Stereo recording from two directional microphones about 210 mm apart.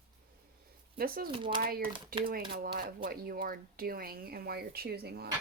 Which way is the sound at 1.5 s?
45° right (ahead or behind).